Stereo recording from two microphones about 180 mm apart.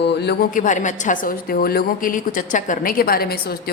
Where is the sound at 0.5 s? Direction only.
45° left (ahead or behind).